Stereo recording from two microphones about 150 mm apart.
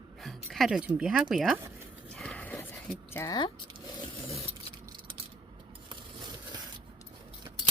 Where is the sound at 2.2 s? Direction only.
10° left (ahead or behind).